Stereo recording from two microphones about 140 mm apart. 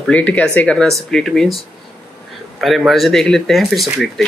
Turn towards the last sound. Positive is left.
turn(degrees=0)  # may be behind; listen again after turning